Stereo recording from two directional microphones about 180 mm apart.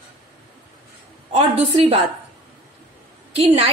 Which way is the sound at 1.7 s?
30° right (ahead or behind).